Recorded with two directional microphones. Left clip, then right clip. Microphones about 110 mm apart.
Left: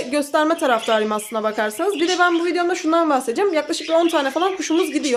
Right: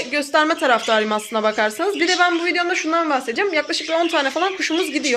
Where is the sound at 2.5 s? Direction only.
30° left (ahead or behind).